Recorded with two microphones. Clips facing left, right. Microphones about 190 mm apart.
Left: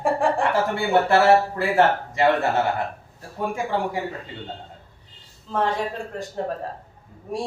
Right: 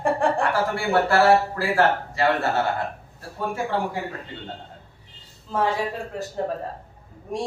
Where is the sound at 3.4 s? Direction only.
20° left (ahead or behind).